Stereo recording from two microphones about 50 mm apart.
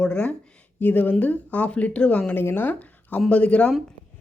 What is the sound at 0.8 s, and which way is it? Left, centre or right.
Speech, left.